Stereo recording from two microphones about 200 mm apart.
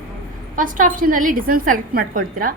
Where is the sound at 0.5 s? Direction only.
40° right (ahead or behind).